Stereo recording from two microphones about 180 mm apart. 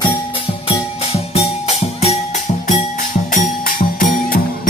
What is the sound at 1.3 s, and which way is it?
Music, 35° left (ahead or behind).